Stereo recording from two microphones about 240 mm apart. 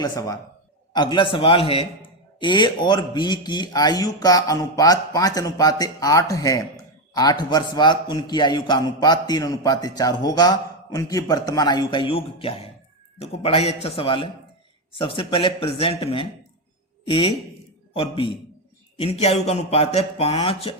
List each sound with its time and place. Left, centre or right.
0.0 s a man's voice: centre